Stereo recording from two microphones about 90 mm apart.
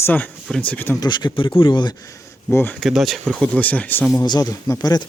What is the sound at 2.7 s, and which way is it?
Speech, centre (ahead or behind).